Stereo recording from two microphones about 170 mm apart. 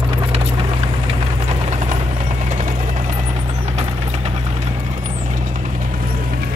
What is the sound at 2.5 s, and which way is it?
Vehicle, 45° right (ahead or behind).